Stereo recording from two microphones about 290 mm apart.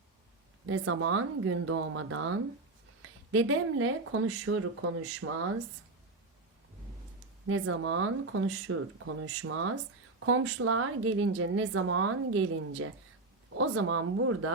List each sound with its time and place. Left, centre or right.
0.7 s a woman's voice: right
7.4 s a woman's voice: right